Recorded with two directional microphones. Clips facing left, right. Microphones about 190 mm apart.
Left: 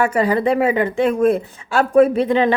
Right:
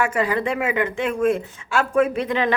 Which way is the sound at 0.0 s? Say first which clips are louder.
Left 5 dB; 35° left (ahead or behind).